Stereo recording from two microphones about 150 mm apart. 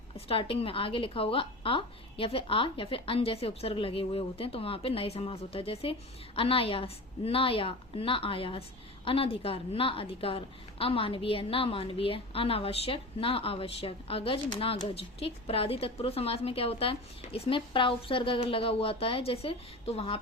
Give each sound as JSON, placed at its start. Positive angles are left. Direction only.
{"t": 0.3, "sound": "a woman's voice", "side_deg": 40}